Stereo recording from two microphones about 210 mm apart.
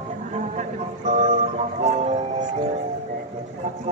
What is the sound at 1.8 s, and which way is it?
Music, 35° right (ahead or behind).